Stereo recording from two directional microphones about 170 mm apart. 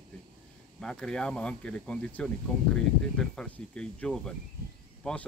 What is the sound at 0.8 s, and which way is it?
Speech, 5° left (ahead or behind).